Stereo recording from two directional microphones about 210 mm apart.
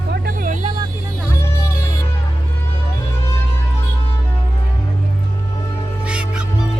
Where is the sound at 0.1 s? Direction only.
40° right (ahead or behind).